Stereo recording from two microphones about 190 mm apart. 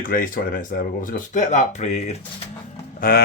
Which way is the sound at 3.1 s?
50° left (ahead or behind).